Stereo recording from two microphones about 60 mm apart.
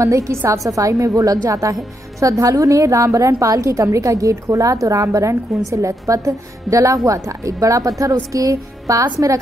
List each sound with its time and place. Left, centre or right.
0.0 s a woman's voice: right